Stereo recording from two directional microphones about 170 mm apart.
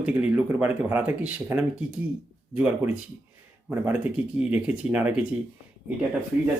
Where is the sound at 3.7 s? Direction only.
10° right (ahead or behind).